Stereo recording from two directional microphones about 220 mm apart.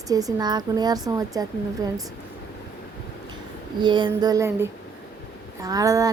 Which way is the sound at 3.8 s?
20° right (ahead or behind).